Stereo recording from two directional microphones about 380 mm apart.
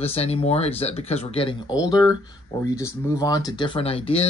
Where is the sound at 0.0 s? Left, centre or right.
Centre.